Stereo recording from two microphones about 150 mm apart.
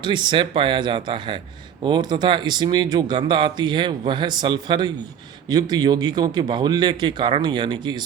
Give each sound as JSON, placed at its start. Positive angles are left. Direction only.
{"t": 0.0, "sound": "speech", "side_deg": -30}